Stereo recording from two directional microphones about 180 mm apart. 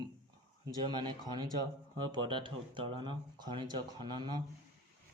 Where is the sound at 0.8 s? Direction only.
25° right (ahead or behind).